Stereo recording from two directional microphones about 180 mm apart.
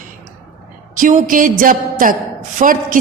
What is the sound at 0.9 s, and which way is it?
A woman's voice, 45° right (ahead or behind).